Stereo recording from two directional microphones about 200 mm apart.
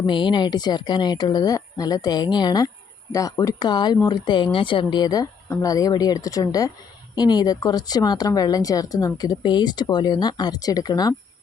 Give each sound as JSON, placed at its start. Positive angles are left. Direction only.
{"t": 0.0, "sound": "speech", "side_deg": 25}